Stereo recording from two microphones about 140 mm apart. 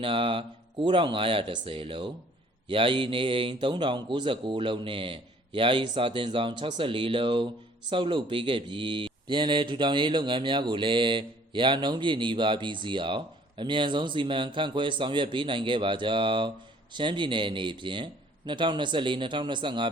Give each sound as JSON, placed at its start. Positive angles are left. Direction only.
{"t": 0.0, "sound": "a man's voice", "side_deg": -40}